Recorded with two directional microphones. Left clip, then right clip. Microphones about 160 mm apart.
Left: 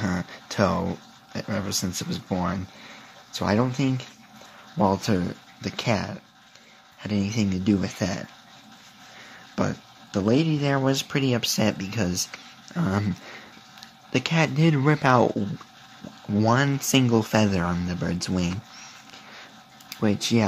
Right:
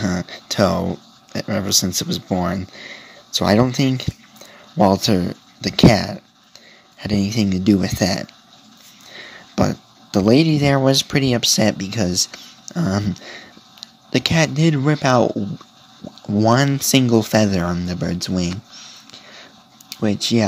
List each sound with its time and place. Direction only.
0.0 s speech: 20° right (ahead or behind)
9.6 s speech: 25° right (ahead or behind)
16.4 s speech: 25° right (ahead or behind)
19.9 s speech: 10° right (ahead or behind)